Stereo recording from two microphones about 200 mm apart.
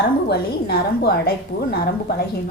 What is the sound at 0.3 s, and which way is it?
A woman's voice, 55° left (ahead or behind).